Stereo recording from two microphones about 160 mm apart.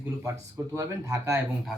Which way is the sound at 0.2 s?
20° right (ahead or behind).